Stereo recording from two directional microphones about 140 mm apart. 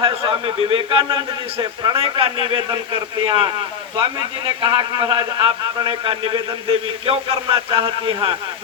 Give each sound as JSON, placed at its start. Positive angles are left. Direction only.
{"t": 0.0, "sound": "a man's voice", "side_deg": -40}